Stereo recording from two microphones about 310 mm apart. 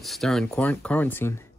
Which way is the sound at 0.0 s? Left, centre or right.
Centre.